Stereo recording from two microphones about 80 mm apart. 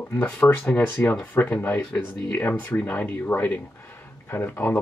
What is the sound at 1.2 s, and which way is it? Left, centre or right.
Speech, left.